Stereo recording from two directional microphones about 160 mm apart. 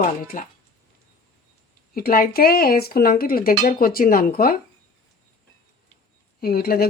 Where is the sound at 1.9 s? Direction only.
65° left (ahead or behind).